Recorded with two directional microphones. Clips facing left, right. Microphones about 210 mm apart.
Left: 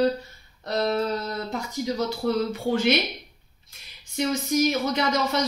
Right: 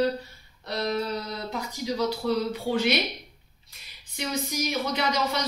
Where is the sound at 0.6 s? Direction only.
50° left (ahead or behind).